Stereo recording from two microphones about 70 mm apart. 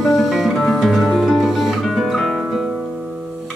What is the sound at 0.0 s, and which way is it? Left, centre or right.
Music, centre.